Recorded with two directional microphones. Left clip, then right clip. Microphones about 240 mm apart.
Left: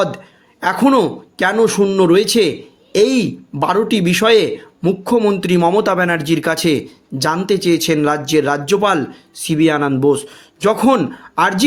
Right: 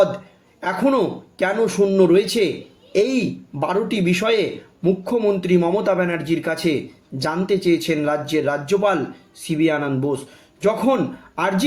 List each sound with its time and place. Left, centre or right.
0.6 s a man's voice: left